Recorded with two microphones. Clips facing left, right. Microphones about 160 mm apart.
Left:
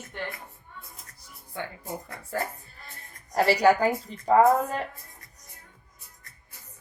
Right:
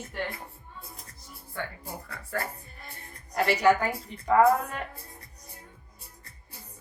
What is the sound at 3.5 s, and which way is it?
A woman's voice, 35° left (ahead or behind).